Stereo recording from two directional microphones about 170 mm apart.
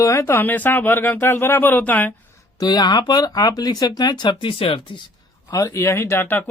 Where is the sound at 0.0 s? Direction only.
15° left (ahead or behind).